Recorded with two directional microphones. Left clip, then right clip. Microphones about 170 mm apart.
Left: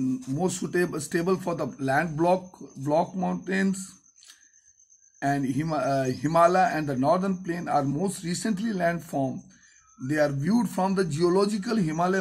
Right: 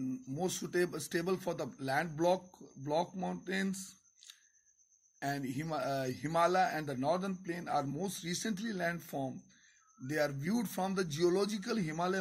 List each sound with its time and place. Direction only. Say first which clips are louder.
0.7 s speech: left 7 dB; 20° right (ahead or behind)
5.2 s speech: left 11 dB; 15° right (ahead or behind)